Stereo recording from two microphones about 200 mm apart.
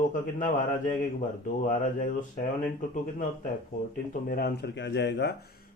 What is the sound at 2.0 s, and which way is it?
Speech, 40° left (ahead or behind).